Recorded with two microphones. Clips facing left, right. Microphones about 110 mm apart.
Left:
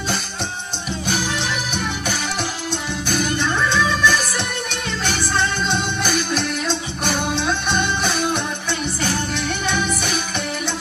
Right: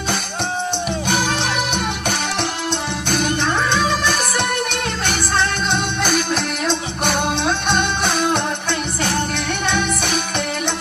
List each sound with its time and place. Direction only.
1.0 s music: 60° right (ahead or behind)
9.6 s music: 60° right (ahead or behind)